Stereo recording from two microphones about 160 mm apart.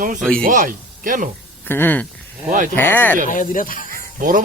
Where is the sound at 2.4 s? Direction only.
55° right (ahead or behind).